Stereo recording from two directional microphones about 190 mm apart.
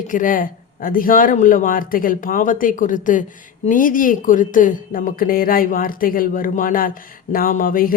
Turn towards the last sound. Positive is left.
turn(degrees=50)  # may be behind; listen again after turning